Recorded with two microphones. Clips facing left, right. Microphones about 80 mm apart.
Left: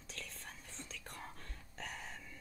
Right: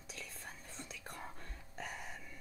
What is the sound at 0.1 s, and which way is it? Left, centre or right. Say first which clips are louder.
Whispering: right 1 dB; centre.